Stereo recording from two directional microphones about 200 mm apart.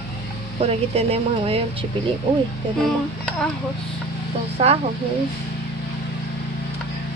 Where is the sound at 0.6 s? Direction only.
30° right (ahead or behind).